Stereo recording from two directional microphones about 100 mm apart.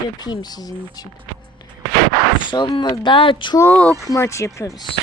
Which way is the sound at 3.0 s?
55° left (ahead or behind).